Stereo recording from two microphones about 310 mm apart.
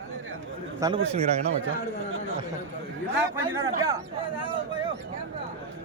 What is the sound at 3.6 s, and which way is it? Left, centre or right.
Speech, centre.